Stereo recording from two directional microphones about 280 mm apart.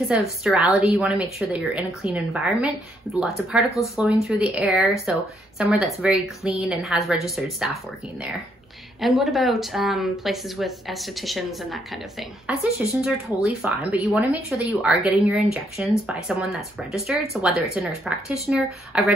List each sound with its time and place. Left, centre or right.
0.1 s speech: centre